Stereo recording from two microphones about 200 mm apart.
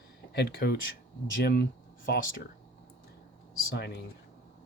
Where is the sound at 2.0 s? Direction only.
45° left (ahead or behind).